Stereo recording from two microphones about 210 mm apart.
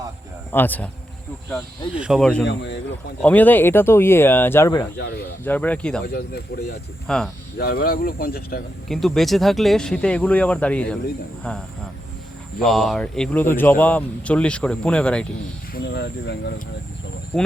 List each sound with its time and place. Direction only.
0.5 s speech: 10° left (ahead or behind)
2.0 s speech: centre (ahead or behind)
2.4 s speech: 55° left (ahead or behind)
3.2 s speech: 10° left (ahead or behind)
4.9 s speech: 50° left (ahead or behind)
5.5 s speech: 5° left (ahead or behind)
6.1 s speech: 50° left (ahead or behind)
7.1 s speech: 5° left (ahead or behind)
7.6 s speech: 45° left (ahead or behind)
8.9 s speech: centre (ahead or behind)
15.7 s speech: 55° left (ahead or behind)
17.3 s speech: 5° left (ahead or behind)